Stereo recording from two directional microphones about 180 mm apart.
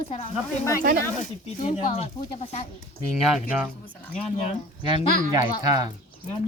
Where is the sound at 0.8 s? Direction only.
50° right (ahead or behind).